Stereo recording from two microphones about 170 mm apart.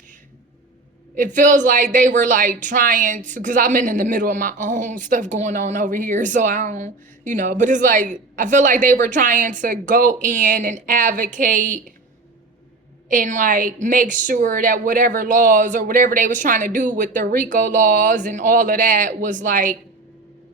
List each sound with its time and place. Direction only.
1.1 s a woman's voice: 50° right (ahead or behind)
13.1 s a woman's voice: 50° right (ahead or behind)